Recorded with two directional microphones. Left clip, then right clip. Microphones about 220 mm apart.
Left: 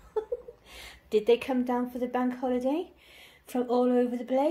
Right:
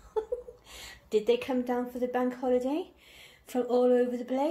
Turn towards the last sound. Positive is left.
turn(degrees=20)  # may be behind; listen again after turning